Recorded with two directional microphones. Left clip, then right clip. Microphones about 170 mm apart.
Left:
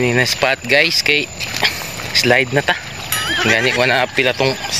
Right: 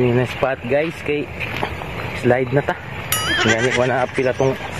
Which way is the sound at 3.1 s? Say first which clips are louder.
Left 2 dB; centre (ahead or behind).